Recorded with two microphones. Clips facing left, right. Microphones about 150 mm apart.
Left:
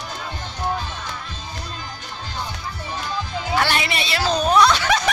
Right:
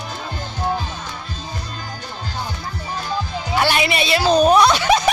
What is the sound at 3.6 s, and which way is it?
Snicker, 15° right (ahead or behind).